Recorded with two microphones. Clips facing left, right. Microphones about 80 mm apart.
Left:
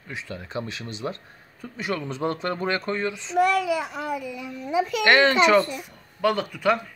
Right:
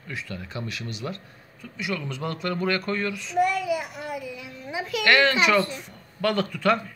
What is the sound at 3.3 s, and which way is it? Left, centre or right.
Speech, left.